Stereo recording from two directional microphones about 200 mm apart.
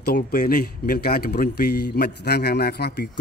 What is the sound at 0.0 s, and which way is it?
A man's voice, 45° left (ahead or behind).